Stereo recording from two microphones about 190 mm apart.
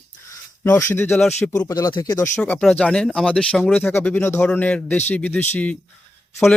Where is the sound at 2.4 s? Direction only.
5° left (ahead or behind).